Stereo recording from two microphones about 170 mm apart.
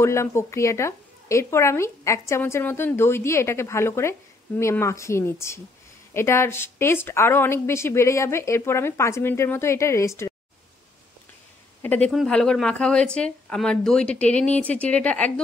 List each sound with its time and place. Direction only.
0.0 s speech: 15° left (ahead or behind)
11.8 s speech: 10° left (ahead or behind)